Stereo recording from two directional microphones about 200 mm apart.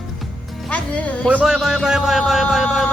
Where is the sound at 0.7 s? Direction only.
5° left (ahead or behind).